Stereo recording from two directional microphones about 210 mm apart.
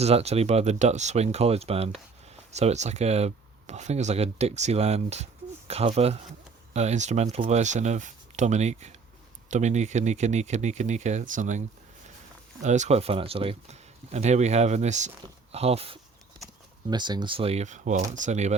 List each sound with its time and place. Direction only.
0.0 s speech: 30° right (ahead or behind)
12.6 s speech: 35° right (ahead or behind)